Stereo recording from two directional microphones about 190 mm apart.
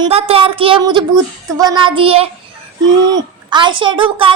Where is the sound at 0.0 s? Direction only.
30° right (ahead or behind).